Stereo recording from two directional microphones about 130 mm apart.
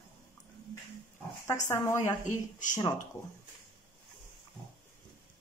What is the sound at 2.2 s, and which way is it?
Speech, 75° left (ahead or behind).